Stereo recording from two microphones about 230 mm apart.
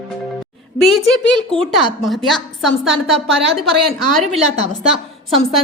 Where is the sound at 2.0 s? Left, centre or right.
Centre.